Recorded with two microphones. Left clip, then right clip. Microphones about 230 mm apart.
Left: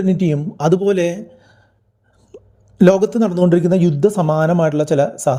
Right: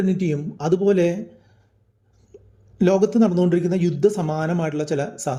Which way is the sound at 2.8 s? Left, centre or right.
Left.